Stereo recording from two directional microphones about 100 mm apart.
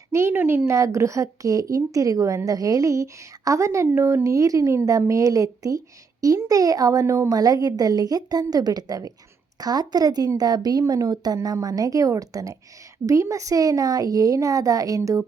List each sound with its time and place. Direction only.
0.1 s a woman's voice: 25° right (ahead or behind)